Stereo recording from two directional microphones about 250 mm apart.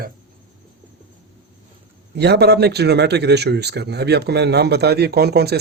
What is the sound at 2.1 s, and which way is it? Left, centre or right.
A man's voice, right.